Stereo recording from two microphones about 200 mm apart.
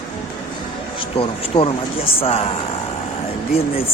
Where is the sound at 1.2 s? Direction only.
25° left (ahead or behind).